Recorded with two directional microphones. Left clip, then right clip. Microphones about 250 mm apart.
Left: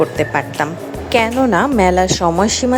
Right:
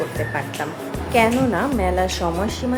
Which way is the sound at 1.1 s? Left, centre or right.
Left.